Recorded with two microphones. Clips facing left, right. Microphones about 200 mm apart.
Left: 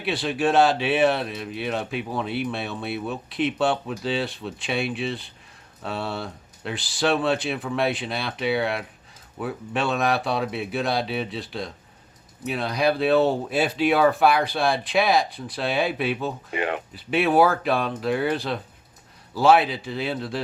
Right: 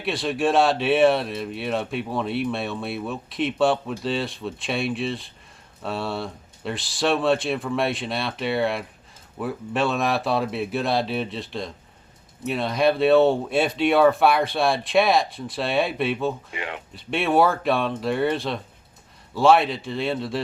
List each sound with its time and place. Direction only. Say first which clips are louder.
0.0 s speech: even; centre (ahead or behind)
16.5 s speech: left 7 dB; 50° left (ahead or behind)
16.9 s speech: even; centre (ahead or behind)